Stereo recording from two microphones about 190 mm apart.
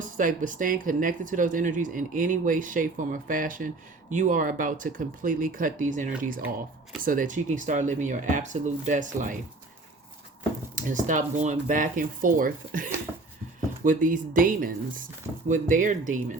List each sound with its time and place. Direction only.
0.2 s speech: 45° right (ahead or behind)
10.8 s speech: 40° right (ahead or behind)